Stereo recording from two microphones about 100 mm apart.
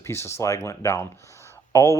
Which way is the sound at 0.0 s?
25° left (ahead or behind).